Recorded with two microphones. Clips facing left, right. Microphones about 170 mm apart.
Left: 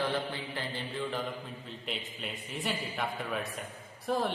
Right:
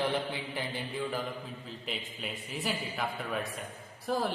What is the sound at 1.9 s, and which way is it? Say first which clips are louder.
A man's voice: even; centre (ahead or behind).